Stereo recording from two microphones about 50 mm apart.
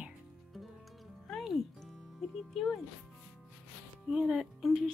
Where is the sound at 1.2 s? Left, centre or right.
Centre.